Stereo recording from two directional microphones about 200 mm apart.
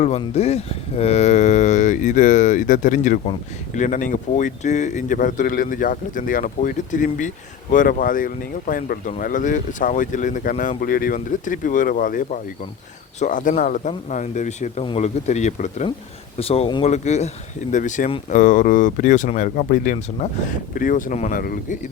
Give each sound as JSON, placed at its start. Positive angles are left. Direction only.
{"t": 0.0, "sound": "speech", "side_deg": 30}